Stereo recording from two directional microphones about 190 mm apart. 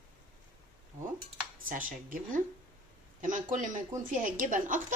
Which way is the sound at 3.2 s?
40° right (ahead or behind).